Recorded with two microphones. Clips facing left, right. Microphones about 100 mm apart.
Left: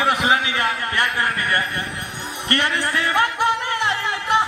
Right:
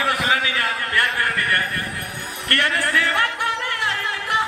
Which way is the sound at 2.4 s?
25° left (ahead or behind).